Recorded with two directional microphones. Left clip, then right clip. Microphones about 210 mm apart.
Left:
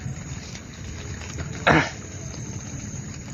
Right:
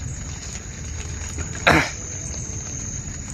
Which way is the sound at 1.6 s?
5° right (ahead or behind).